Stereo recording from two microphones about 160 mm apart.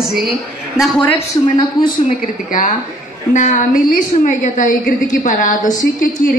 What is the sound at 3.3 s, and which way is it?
A woman's voice, 50° left (ahead or behind).